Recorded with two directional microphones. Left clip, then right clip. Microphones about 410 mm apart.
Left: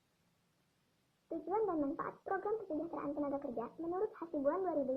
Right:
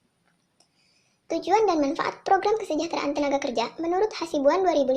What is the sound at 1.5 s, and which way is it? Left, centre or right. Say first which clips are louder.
Speech: right 15 dB; centre.